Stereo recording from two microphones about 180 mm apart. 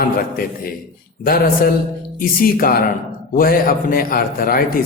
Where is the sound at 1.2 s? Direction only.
55° left (ahead or behind).